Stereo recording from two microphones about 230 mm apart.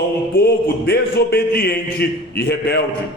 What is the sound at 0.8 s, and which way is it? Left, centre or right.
A man's voice, left.